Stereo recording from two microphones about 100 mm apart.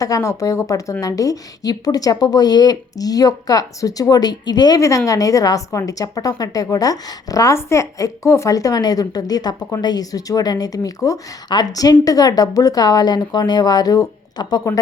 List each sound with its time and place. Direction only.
0.0 s a woman's voice: 35° left (ahead or behind)
4.8 s a woman's voice: 35° left (ahead or behind)